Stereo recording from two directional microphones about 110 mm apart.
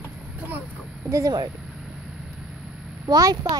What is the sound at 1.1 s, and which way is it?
Speech, 30° right (ahead or behind).